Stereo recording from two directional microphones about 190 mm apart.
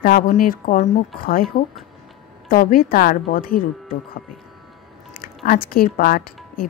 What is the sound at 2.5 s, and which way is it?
Speech, 50° left (ahead or behind).